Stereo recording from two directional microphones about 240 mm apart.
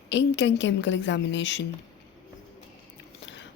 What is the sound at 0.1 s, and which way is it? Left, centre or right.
A woman's voice, left.